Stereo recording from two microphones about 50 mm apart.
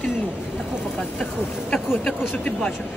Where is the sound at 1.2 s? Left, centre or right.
Centre.